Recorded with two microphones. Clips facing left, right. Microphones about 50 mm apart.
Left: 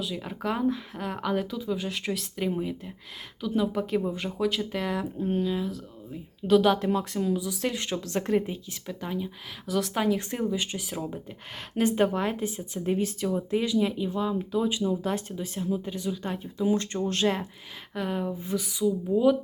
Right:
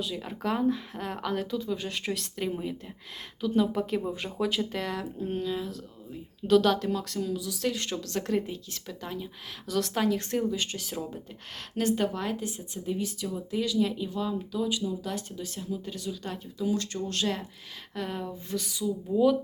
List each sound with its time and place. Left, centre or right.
0.0 s speech: centre
6.7 s speech: left
8.9 s speech: centre
11.8 s speech: left
12.8 s speech: left
17.9 s speech: centre